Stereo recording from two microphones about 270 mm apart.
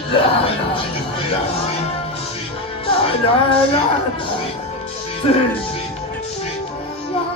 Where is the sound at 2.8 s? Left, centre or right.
Left.